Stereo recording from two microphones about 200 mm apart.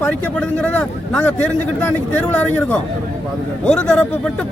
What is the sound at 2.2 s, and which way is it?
A man's voice, 5° left (ahead or behind).